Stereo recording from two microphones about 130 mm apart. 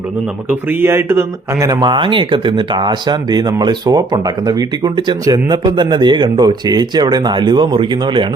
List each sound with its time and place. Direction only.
0.7 s speech: 15° right (ahead or behind)
1.9 s speech: 40° right (ahead or behind)